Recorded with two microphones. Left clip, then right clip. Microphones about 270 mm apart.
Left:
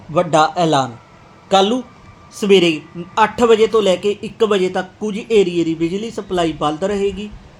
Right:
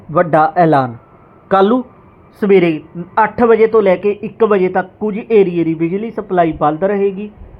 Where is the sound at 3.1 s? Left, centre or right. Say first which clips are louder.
Right 2 dB; centre.